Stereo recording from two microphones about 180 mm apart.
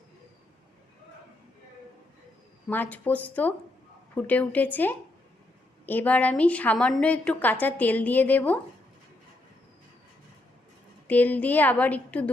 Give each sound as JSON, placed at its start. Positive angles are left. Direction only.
{"t": 2.6, "sound": "a woman's voice", "side_deg": 10}
{"t": 11.1, "sound": "a woman's voice", "side_deg": 10}